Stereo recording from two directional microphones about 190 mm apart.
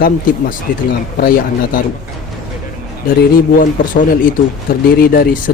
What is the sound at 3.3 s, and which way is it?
Speech, 45° left (ahead or behind).